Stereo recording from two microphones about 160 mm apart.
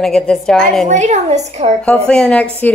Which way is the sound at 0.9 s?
45° right (ahead or behind).